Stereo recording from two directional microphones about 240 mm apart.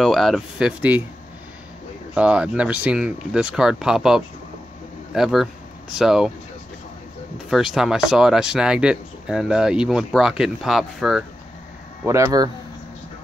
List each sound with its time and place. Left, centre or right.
0.0 s speech: centre
2.1 s speech: centre
7.3 s speech: centre
12.0 s speech: centre